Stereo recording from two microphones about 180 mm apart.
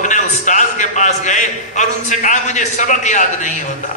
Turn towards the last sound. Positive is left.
turn(degrees=45)  # may be behind; listen again after turning